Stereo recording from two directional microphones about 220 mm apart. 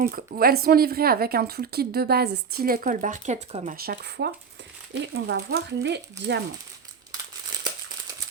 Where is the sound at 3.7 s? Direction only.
45° right (ahead or behind).